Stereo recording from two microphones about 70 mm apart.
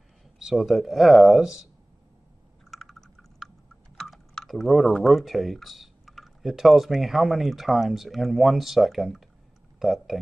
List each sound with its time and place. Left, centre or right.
0.4 s speech: centre
2.7 s a sound: centre
3.9 s speech: centre